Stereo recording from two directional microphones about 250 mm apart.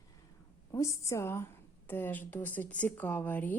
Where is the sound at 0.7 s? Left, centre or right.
Centre.